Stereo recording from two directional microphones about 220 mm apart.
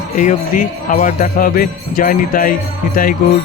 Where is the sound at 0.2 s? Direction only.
35° left (ahead or behind).